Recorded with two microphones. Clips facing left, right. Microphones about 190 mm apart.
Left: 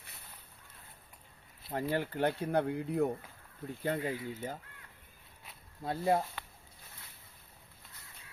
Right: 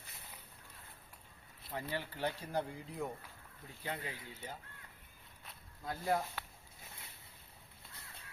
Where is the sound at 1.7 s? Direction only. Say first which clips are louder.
Left 8 dB; 50° left (ahead or behind).